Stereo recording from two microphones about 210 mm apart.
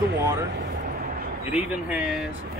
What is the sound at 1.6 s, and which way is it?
Speech, 5° right (ahead or behind).